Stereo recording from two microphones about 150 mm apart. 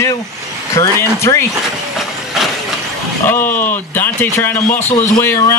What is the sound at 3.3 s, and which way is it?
Speech, 15° left (ahead or behind).